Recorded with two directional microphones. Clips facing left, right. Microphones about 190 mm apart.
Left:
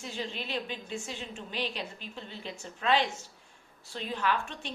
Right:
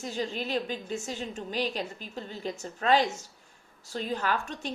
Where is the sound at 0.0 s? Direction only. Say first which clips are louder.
Right 5 dB; 40° right (ahead or behind).